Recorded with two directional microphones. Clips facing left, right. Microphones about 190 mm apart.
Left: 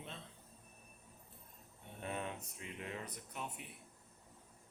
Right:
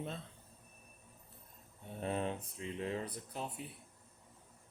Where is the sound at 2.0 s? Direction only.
30° right (ahead or behind).